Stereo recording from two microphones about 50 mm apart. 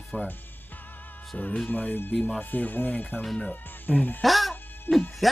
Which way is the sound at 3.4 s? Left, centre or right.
Left.